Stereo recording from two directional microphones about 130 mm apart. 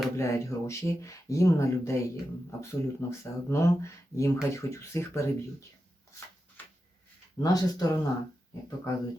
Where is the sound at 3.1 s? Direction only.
20° left (ahead or behind).